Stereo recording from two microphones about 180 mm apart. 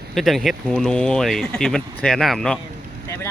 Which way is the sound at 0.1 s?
Centre (ahead or behind).